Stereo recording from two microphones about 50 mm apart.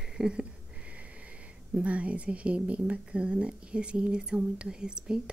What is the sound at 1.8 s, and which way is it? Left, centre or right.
Speech, right.